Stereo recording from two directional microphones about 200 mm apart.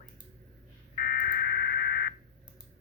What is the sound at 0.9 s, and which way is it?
Telephone dialing, 50° left (ahead or behind).